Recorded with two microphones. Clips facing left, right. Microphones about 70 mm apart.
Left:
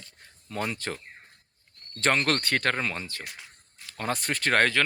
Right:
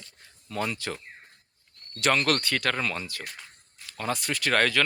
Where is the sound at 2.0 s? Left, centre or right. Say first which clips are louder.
Right 1 dB; left.